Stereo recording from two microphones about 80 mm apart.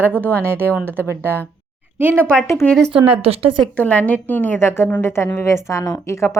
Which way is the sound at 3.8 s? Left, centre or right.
Centre.